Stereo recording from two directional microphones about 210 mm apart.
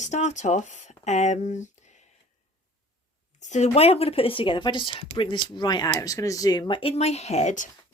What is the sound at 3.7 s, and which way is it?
Speech, 30° left (ahead or behind).